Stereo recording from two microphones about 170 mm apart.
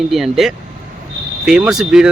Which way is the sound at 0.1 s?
Centre (ahead or behind).